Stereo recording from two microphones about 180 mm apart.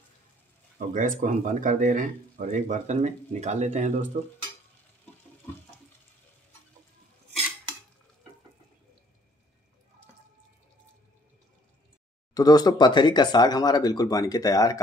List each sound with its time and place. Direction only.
0.7 s speech: 45° right (ahead or behind)
4.1 s stir: 40° right (ahead or behind)
12.4 s speech: 20° left (ahead or behind)